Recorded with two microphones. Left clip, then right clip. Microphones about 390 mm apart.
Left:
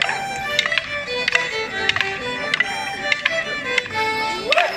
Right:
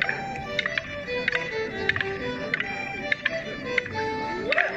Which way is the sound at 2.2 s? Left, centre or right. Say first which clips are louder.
Left 7 dB; left.